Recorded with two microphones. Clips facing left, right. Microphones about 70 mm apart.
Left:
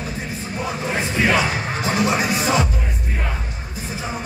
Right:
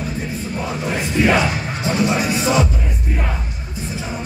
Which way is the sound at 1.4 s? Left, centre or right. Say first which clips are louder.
Right 1 dB; left.